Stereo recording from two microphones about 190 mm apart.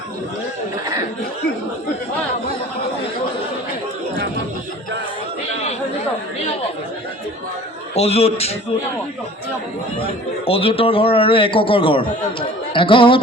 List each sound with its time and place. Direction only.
7.9 s a man's voice: 35° left (ahead or behind)
10.4 s a man's voice: 30° left (ahead or behind)